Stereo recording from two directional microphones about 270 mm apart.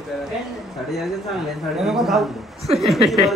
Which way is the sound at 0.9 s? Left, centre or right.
Centre.